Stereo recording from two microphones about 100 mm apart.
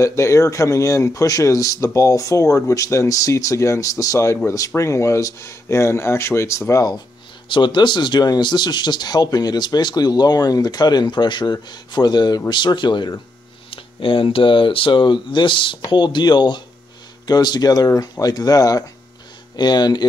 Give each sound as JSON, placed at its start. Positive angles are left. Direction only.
{"t": 0.0, "sound": "speech", "side_deg": 30}
{"t": 6.7, "sound": "speech", "side_deg": 40}
{"t": 7.4, "sound": "speech", "side_deg": 50}
{"t": 13.7, "sound": "speech", "side_deg": 60}